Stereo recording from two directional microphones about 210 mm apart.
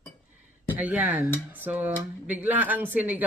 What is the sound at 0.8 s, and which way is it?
Speech, 5° right (ahead or behind).